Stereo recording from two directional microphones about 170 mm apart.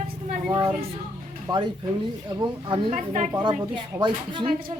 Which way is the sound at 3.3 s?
25° right (ahead or behind).